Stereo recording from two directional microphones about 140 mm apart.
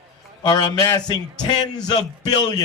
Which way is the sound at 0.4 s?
30° left (ahead or behind).